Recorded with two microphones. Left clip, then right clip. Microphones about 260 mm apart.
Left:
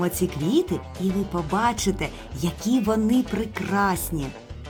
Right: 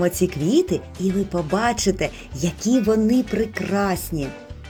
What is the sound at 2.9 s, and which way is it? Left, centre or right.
A woman's voice, centre.